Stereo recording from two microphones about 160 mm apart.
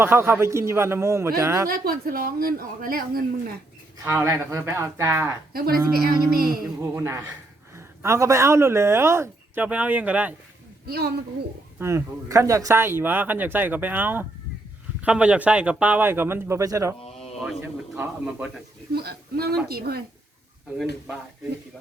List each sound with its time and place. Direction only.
0.0 s speech: 15° right (ahead or behind)
1.8 s a woman's voice: 65° right (ahead or behind)
3.9 s speech: 15° right (ahead or behind)
5.9 s a woman's voice: 70° right (ahead or behind)
6.7 s speech: 15° right (ahead or behind)
10.8 s a woman's voice: 80° right
11.8 s speech: 15° right (ahead or behind)
17.0 s a sound: 40° left (ahead or behind)
17.9 s speech: 10° right (ahead or behind)
18.9 s speech: 80° right